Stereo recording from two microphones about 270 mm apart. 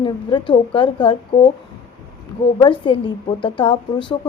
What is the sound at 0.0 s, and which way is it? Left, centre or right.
A woman's voice, centre.